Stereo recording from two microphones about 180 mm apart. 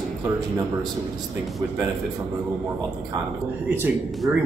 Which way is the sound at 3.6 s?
10° right (ahead or behind).